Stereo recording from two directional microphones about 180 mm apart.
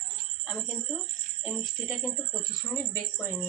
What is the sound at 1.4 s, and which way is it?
Music, centre (ahead or behind).